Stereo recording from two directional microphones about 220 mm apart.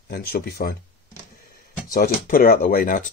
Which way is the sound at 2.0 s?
40° left (ahead or behind).